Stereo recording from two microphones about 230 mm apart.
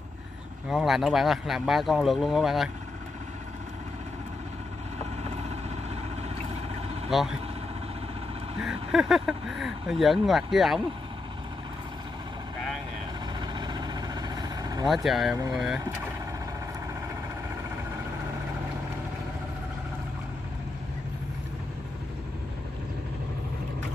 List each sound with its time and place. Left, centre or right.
0.7 s speech: centre
7.1 s speech: centre
8.6 s speech: centre
13.5 s vehicle: centre
15.0 s speech: centre